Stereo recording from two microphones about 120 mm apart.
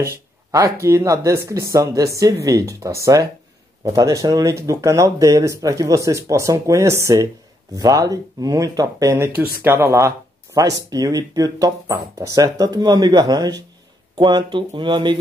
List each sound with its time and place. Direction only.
0.5 s speech: 25° right (ahead or behind)
9.1 s speech: 20° right (ahead or behind); by 15.1 s 40° right (ahead or behind)